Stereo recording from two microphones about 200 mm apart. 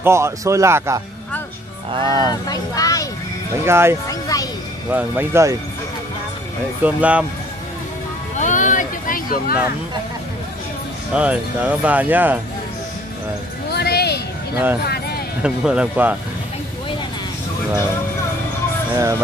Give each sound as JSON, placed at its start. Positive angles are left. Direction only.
{"t": 0.0, "sound": "speech", "side_deg": -15}
{"t": 2.4, "sound": "speech", "side_deg": 20}
{"t": 3.6, "sound": "speech", "side_deg": -10}
{"t": 4.1, "sound": "a sound", "side_deg": 15}
{"t": 4.9, "sound": "speech", "side_deg": -10}
{"t": 6.8, "sound": "speech", "side_deg": -5}
{"t": 8.4, "sound": "a sound", "side_deg": 40}
{"t": 11.1, "sound": "speech", "side_deg": -5}
{"t": 13.7, "sound": "a sound", "side_deg": 55}
{"t": 15.4, "sound": "speech", "side_deg": -5}